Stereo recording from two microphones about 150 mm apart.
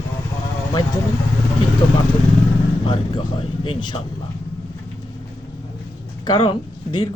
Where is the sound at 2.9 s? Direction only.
35° left (ahead or behind).